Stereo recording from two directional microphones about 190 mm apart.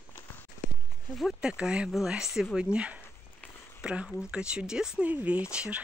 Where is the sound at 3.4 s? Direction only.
10° left (ahead or behind).